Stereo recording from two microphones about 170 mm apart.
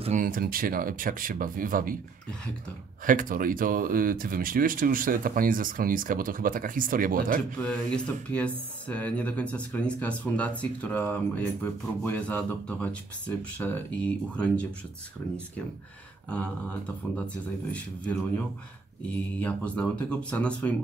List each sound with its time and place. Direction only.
0.0 s speech: 50° right (ahead or behind)
3.1 s speech: 55° right (ahead or behind)
7.5 s speech: 5° left (ahead or behind)
16.3 s speech: 5° left (ahead or behind)
19.0 s speech: 10° left (ahead or behind)